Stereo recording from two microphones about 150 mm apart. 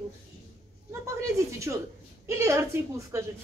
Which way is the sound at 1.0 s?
20° right (ahead or behind).